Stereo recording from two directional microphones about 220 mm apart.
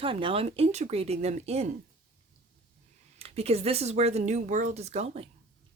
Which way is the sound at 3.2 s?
25° right (ahead or behind).